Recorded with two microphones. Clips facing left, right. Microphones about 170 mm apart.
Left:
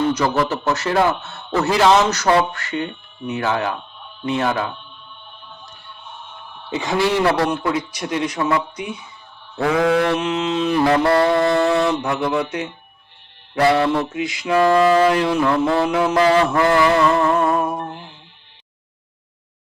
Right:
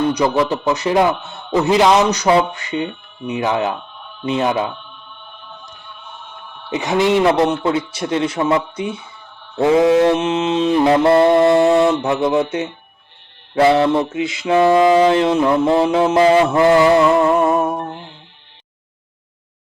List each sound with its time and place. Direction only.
0.3 s a man's voice: 15° right (ahead or behind)
4.2 s mantra: 20° right (ahead or behind)
6.7 s mantra: 20° right (ahead or behind)